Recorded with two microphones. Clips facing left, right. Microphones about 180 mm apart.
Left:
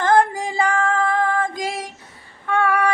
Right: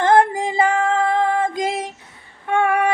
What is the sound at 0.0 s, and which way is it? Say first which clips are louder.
Female singing: right 2 dB; 20° right (ahead or behind).